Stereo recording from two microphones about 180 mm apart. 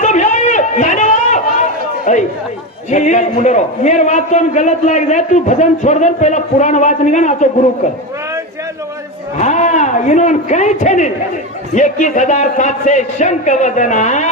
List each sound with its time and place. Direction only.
0.0 s a sound: 40° left (ahead or behind)
2.1 s a man's voice: 40° left (ahead or behind)
9.4 s a man's voice: 40° left (ahead or behind)